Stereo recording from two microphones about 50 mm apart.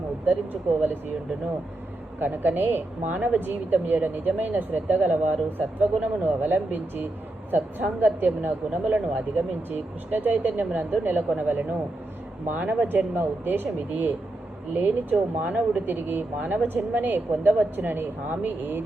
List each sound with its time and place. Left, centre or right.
0.3 s speech: right
2.1 s a woman's voice: right
15.4 s speech: right
15.9 s a woman's voice: right